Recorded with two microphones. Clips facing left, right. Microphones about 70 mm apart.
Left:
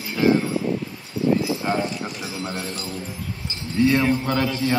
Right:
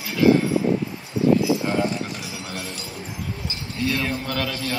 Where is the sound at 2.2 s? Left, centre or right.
Left.